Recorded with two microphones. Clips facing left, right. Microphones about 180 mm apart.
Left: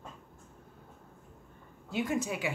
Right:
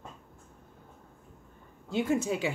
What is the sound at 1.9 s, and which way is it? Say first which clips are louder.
Speech: right 4 dB; 25° right (ahead or behind).